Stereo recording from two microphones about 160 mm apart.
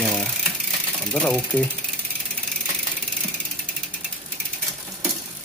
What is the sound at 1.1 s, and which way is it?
Speech, 10° left (ahead or behind).